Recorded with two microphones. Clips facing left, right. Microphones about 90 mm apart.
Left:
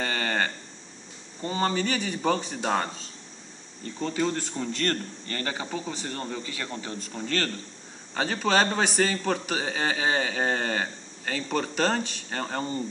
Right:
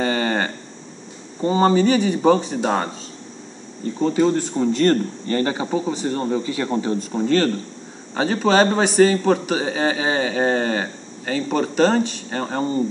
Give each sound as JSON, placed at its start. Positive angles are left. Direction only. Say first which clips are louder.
{"t": 0.0, "sound": "a sound", "louder": "right 7 dB", "side_deg": -15}
{"t": 1.4, "sound": "a man's voice", "louder": "right 11 dB", "side_deg": -15}
{"t": 4.0, "sound": "a man's voice", "louder": "right 10 dB", "side_deg": -15}